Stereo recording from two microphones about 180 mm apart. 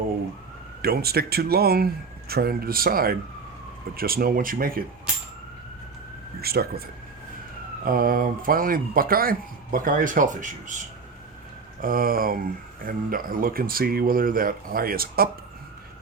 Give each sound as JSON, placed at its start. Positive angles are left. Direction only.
{"t": 0.8, "sound": "speech", "side_deg": -60}
{"t": 6.4, "sound": "speech", "side_deg": -60}
{"t": 7.9, "sound": "speech", "side_deg": -55}
{"t": 11.8, "sound": "speech", "side_deg": -50}